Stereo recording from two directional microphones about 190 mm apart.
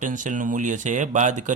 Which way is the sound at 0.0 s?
40° right (ahead or behind).